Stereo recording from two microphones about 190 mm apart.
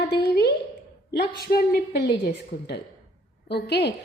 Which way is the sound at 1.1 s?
55° left (ahead or behind).